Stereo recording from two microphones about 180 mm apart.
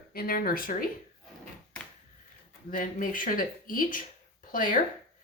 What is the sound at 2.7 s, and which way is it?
Speech, 50° left (ahead or behind).